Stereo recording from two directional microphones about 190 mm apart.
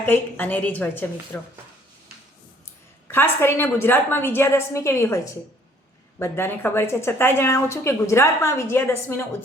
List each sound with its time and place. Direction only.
0.0 s a woman's voice: 10° left (ahead or behind)
3.1 s a woman's voice: 10° left (ahead or behind)